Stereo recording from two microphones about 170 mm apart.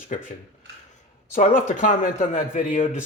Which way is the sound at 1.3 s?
50° left (ahead or behind).